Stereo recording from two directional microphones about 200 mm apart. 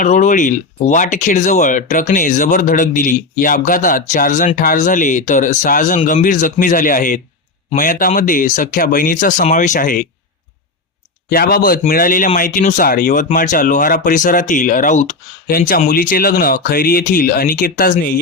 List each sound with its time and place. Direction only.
0.0 s speech: 40° left (ahead or behind)
11.3 s speech: 50° left (ahead or behind)